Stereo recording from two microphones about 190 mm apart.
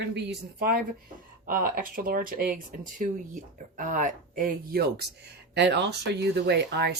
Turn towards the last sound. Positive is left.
turn(degrees=-60)  # may be behind; listen again after turning